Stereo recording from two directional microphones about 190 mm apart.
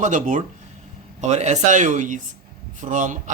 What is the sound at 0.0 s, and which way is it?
Speech, 40° right (ahead or behind).